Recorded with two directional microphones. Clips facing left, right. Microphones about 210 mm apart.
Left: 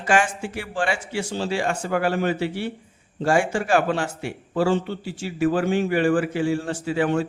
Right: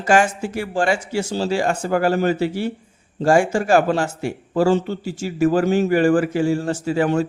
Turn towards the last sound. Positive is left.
turn(degrees=-45)  # may be behind; listen again after turning